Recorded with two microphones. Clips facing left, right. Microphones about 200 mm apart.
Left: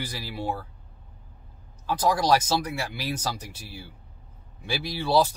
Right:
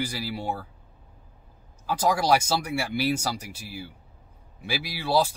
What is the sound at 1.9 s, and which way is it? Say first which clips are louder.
Speech: even; 10° right (ahead or behind).